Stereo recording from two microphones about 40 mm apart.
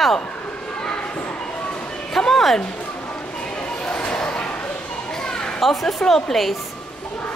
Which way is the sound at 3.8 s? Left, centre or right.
Left.